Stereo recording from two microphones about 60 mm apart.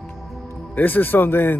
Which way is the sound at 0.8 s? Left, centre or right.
Left.